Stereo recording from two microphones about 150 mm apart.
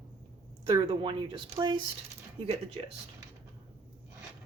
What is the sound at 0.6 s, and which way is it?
Speech, 35° right (ahead or behind).